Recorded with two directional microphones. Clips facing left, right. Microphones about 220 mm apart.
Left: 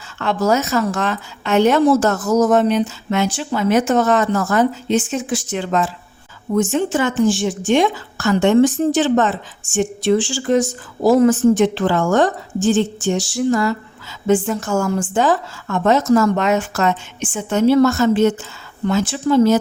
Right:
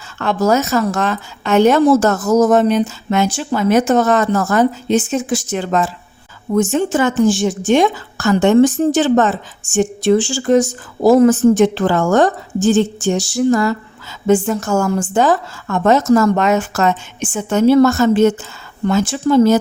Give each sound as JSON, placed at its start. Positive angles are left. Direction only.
{"t": 0.2, "sound": "a woman's voice", "side_deg": -45}